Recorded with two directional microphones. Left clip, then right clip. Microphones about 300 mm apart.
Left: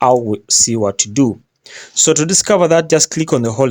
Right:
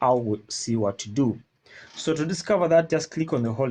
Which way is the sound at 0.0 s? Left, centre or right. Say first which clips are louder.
Left 9 dB; left.